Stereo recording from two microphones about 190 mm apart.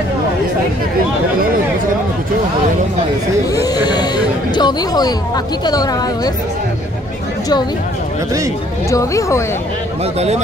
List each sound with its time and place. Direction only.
3.6 s speech: 20° left (ahead or behind)
8.9 s speech: 15° left (ahead or behind)
10.1 s speech: 35° right (ahead or behind)